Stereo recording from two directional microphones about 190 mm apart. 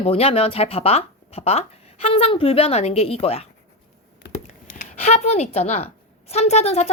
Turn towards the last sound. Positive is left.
turn(degrees=35)  # may be behind; listen again after turning